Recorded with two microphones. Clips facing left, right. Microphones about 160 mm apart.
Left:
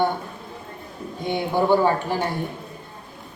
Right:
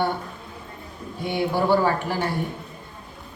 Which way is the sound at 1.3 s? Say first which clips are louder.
Left 1 dB; 20° left (ahead or behind).